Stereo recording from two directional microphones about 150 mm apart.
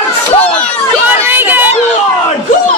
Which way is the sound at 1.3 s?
15° right (ahead or behind).